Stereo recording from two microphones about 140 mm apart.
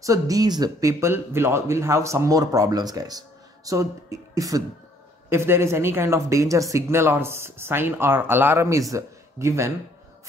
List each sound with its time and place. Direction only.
0.0 s speech: 25° right (ahead or behind)